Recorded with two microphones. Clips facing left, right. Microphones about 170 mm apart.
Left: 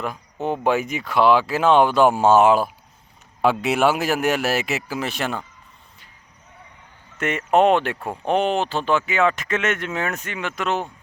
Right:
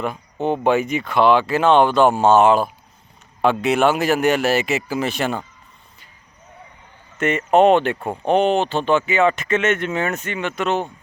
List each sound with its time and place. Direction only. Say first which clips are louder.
0.0 s speech: right 3 dB; centre (ahead or behind)
7.2 s speech: right 3 dB; centre (ahead or behind)